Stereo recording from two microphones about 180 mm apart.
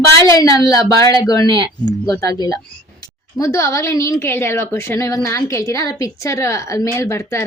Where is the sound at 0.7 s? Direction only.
20° left (ahead or behind).